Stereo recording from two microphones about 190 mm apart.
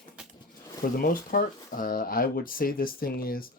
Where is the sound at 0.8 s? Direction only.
45° left (ahead or behind).